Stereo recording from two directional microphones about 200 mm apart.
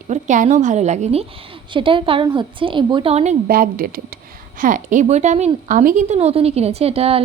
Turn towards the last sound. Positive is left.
turn(degrees=-30)  # may be behind; listen again after turning